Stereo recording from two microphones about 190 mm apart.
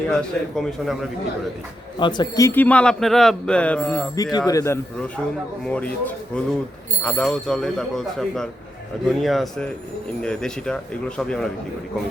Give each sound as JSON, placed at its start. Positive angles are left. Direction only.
{"t": 0.1, "sound": "speech", "side_deg": 5}
{"t": 2.0, "sound": "a man's voice", "side_deg": 25}
{"t": 4.1, "sound": "a man's voice", "side_deg": 20}